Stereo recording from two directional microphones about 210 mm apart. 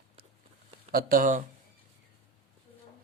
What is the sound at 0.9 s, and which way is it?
Speech, 40° right (ahead or behind).